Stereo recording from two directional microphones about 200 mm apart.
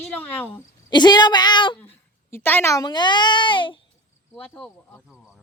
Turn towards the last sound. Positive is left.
turn(degrees=5)  # may be behind; listen again after turning